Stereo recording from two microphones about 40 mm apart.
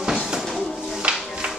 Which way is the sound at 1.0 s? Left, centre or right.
Right.